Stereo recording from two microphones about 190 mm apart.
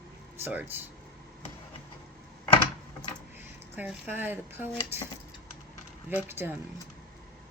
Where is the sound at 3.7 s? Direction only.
10° right (ahead or behind).